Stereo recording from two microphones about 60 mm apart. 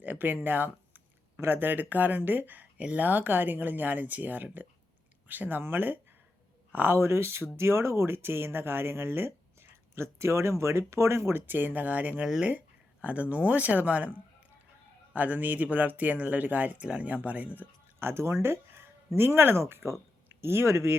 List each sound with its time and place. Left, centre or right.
0.0 s a sound: right
1.4 s speech: right
15.1 s speech: right
18.0 s speech: right